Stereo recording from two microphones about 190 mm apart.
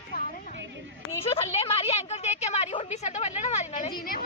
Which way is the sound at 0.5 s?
70° right (ahead or behind).